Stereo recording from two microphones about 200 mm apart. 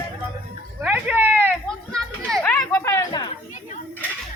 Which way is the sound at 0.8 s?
10° right (ahead or behind).